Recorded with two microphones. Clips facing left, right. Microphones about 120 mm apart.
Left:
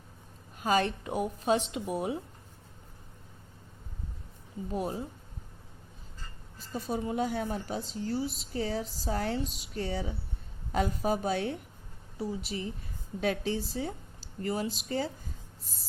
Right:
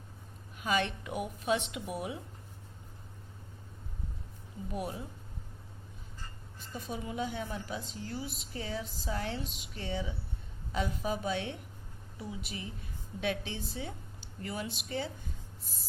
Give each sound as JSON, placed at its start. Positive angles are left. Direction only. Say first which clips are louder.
{"t": 0.5, "sound": "a woman's voice", "louder": "left 4 dB", "side_deg": 40}
{"t": 4.7, "sound": "speech", "louder": "left 5 dB", "side_deg": 30}
{"t": 6.6, "sound": "a woman's voice", "louder": "left 6 dB", "side_deg": 35}